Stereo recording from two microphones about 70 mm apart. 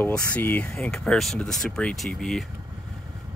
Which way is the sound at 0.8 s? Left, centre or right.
Centre.